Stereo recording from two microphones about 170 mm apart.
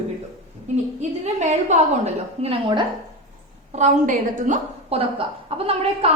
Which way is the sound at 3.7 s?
45° right (ahead or behind).